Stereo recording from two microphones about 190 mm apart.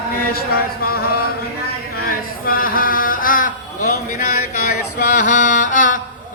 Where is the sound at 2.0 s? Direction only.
50° left (ahead or behind).